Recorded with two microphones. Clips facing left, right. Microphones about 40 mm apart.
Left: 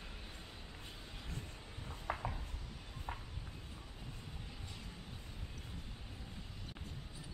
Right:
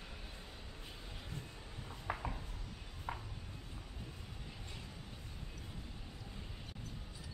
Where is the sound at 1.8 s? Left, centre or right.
Centre.